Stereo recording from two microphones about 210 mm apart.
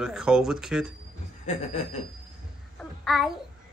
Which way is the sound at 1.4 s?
35° left (ahead or behind).